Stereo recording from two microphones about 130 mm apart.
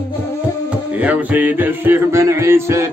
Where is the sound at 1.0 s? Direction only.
10° right (ahead or behind).